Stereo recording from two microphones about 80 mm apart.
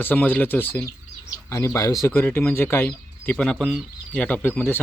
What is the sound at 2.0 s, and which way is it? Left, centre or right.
Speech, left.